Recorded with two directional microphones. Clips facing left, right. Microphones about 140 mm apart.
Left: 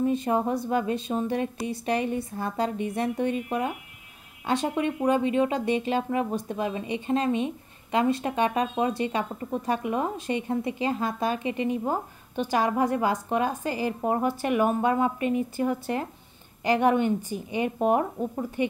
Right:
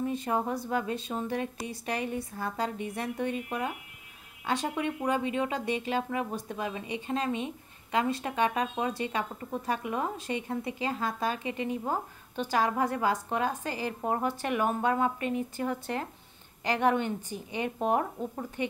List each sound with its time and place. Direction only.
0.1 s a woman's voice: 20° left (ahead or behind)